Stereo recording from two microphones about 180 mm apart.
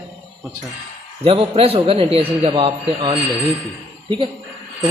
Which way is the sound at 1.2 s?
30° right (ahead or behind).